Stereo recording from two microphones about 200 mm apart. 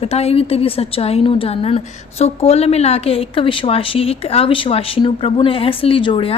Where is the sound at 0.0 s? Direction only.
30° left (ahead or behind).